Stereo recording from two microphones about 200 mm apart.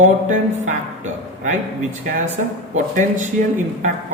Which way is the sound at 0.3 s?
35° right (ahead or behind).